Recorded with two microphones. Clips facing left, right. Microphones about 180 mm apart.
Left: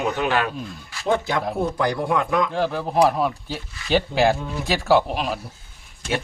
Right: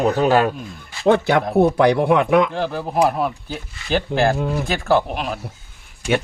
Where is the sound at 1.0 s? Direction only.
70° right (ahead or behind).